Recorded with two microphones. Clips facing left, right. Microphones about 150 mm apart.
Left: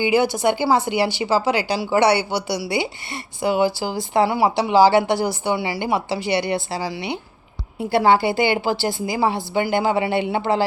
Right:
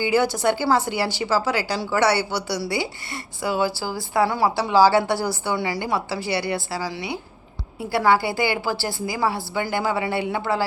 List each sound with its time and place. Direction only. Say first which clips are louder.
0.0 s a woman's voice: left 2 dB; 15° left (ahead or behind)